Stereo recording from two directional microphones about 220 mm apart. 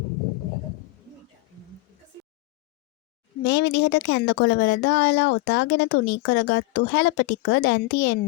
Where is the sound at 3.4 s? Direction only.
50° left (ahead or behind).